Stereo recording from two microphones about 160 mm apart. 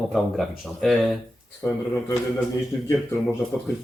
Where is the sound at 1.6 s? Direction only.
15° left (ahead or behind).